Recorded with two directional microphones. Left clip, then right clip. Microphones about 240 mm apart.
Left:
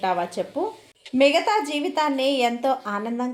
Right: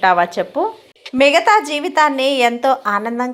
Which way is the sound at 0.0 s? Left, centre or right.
Centre.